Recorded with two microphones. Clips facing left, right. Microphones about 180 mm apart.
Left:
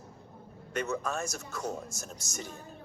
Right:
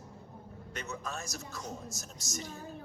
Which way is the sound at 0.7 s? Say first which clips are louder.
Left 8 dB; 50° left (ahead or behind).